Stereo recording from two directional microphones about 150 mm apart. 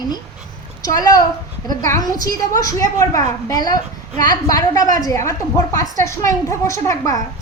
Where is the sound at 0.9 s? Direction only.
25° left (ahead or behind).